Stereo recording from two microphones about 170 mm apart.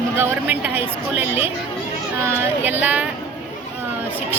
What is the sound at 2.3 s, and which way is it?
Speech, 10° right (ahead or behind).